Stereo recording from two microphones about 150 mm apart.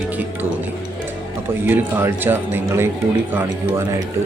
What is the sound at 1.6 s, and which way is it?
Speech, 15° right (ahead or behind).